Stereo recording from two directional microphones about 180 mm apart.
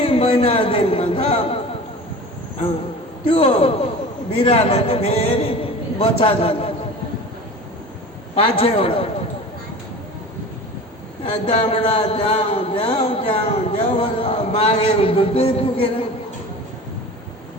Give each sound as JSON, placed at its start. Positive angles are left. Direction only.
{"t": 0.0, "sound": "a man's voice", "side_deg": 30}
{"t": 3.2, "sound": "a man's voice", "side_deg": 30}
{"t": 8.4, "sound": "a man's voice", "side_deg": 30}
{"t": 11.2, "sound": "a man's voice", "side_deg": 35}